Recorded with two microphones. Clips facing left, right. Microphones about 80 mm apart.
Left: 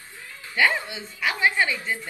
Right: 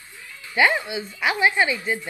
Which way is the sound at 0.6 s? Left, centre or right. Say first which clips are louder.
Right 3 dB; centre.